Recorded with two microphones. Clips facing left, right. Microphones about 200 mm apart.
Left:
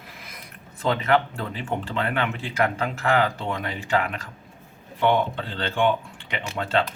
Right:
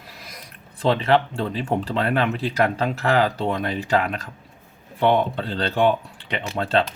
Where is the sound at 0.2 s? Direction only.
35° right (ahead or behind).